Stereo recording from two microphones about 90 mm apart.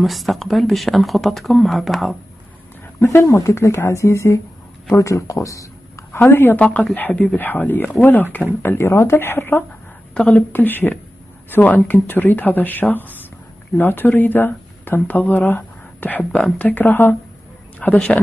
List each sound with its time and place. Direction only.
0.0 s speech: centre (ahead or behind)
3.0 s speech: 30° left (ahead or behind)
6.6 s speech: 10° left (ahead or behind)